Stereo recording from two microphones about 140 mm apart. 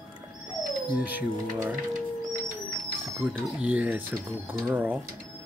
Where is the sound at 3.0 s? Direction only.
10° right (ahead or behind).